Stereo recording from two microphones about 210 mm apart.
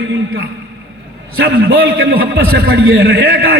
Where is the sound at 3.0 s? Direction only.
50° right (ahead or behind).